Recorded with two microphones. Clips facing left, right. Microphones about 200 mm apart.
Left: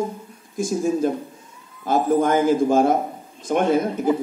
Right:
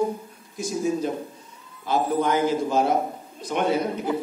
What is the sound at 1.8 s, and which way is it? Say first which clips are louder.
Speech: left 4 dB; 45° left (ahead or behind).